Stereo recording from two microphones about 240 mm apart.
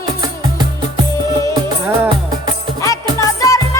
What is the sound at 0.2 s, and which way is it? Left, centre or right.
Music, centre.